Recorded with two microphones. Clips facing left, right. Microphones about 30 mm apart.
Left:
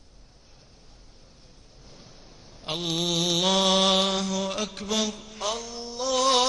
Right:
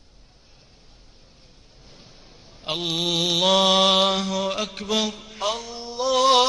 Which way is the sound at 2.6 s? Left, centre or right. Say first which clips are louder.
Right 3 dB; centre.